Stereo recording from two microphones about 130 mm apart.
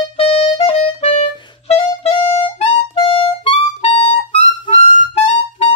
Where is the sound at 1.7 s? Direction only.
40° left (ahead or behind).